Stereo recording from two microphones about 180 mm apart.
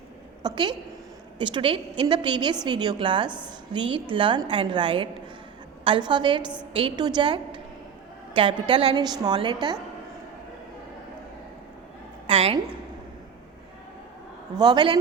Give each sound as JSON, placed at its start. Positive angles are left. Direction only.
{"t": 0.4, "sound": "a woman's voice", "side_deg": -25}
{"t": 12.3, "sound": "a woman's voice", "side_deg": -35}
{"t": 14.5, "sound": "a woman's voice", "side_deg": -25}